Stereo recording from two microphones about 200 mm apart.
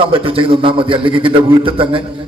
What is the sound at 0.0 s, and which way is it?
A man's voice, 25° right (ahead or behind).